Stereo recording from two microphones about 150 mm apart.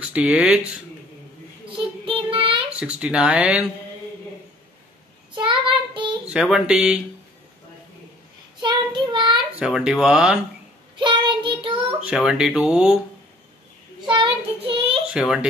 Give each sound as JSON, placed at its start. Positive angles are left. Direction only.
{"t": 0.1, "sound": "speech", "side_deg": -5}
{"t": 2.0, "sound": "child singing", "side_deg": -40}
{"t": 2.7, "sound": "speech", "side_deg": -5}
{"t": 5.3, "sound": "child singing", "side_deg": -35}
{"t": 6.2, "sound": "speech", "side_deg": -5}
{"t": 8.5, "sound": "child singing", "side_deg": -30}
{"t": 9.6, "sound": "speech", "side_deg": -5}
{"t": 11.0, "sound": "child singing", "side_deg": -35}
{"t": 12.0, "sound": "speech", "side_deg": -5}
{"t": 14.0, "sound": "child singing", "side_deg": -30}
{"t": 15.1, "sound": "speech", "side_deg": -5}